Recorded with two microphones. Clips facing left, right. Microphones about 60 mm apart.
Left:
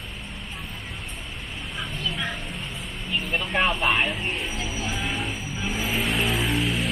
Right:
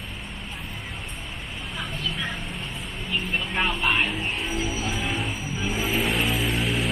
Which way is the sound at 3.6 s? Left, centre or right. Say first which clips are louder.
Left 2 dB; centre.